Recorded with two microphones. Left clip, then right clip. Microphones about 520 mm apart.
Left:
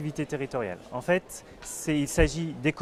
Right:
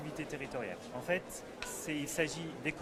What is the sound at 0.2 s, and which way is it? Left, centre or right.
Speech, left.